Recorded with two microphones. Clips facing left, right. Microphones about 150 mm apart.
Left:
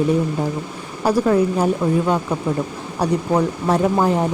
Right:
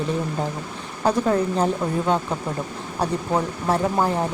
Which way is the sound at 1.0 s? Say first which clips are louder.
Left 4 dB; 10° left (ahead or behind).